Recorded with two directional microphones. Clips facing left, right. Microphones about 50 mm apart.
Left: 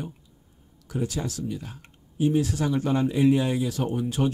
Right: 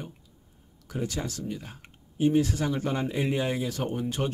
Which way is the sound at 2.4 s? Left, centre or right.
Centre.